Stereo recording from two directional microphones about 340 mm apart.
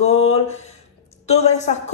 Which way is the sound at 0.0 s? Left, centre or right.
Centre.